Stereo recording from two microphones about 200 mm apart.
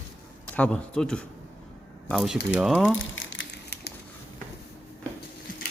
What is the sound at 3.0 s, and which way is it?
Crumpling, 70° left (ahead or behind).